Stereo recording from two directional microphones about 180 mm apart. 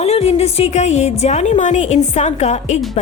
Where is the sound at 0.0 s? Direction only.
35° left (ahead or behind).